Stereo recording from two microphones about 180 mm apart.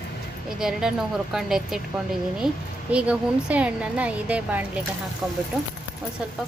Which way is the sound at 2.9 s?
5° right (ahead or behind).